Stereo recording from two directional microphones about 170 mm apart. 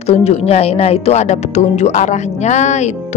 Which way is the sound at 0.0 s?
35° left (ahead or behind).